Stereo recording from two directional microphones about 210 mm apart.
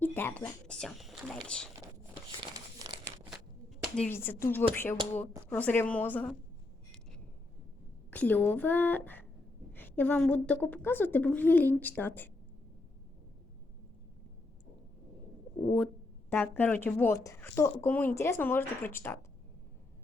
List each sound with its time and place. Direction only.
0.0 s speech: 10° left (ahead or behind)
2.4 s crumpling: 20° right (ahead or behind)
3.9 s speech: 5° left (ahead or behind)
8.1 s speech: 10° left (ahead or behind)
16.3 s speech: 10° left (ahead or behind)